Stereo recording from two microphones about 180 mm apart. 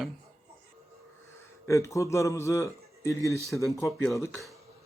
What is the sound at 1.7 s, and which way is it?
A man's voice, 15° left (ahead or behind).